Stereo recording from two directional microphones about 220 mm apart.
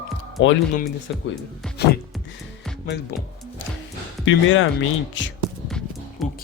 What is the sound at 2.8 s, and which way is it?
Speech, 50° left (ahead or behind).